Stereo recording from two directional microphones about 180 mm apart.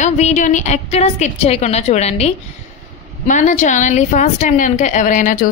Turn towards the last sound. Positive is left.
turn(degrees=45)  # may be behind; listen again after turning